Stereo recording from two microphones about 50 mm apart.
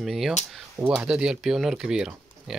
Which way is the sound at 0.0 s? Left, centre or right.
Centre.